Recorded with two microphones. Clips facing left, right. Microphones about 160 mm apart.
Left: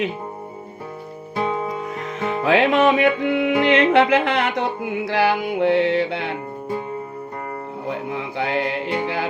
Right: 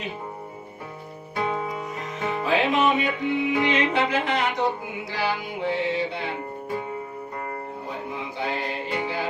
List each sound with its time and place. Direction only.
1.4 s music: 30° left (ahead or behind)
2.4 s music: 70° left (ahead or behind)
3.6 s music: 65° left (ahead or behind)
8.4 s music: 65° left (ahead or behind)